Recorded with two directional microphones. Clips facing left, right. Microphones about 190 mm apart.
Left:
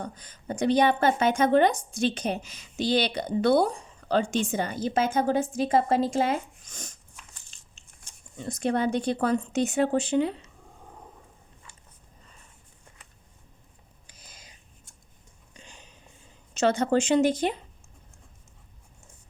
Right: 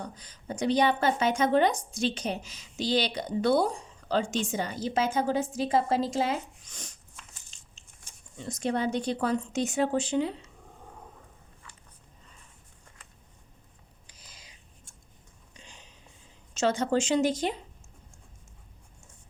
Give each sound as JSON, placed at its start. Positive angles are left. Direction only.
{"t": 0.0, "sound": "a woman's voice", "side_deg": 55}
{"t": 7.5, "sound": "biting", "side_deg": 55}
{"t": 8.4, "sound": "a woman's voice", "side_deg": 55}
{"t": 14.1, "sound": "a sound", "side_deg": 50}
{"t": 15.6, "sound": "a sound", "side_deg": 50}
{"t": 16.6, "sound": "a woman's voice", "side_deg": 60}